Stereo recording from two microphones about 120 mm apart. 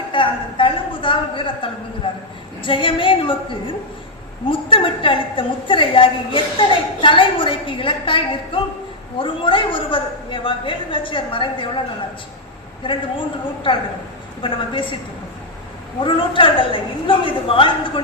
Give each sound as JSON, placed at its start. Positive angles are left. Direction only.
{"t": 0.1, "sound": "a sound", "side_deg": 45}
{"t": 2.0, "sound": "a woman's voice", "side_deg": 45}
{"t": 13.7, "sound": "a woman's voice", "side_deg": 45}
{"t": 16.0, "sound": "a woman's voice", "side_deg": 45}